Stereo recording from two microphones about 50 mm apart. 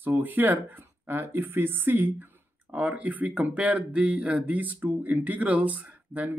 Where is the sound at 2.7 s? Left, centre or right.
Right.